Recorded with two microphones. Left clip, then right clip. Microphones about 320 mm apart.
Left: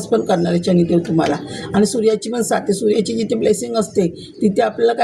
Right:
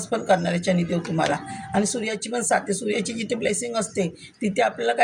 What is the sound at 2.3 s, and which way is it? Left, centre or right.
Speech, right.